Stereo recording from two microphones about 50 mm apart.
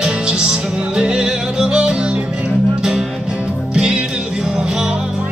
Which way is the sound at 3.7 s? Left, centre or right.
Centre.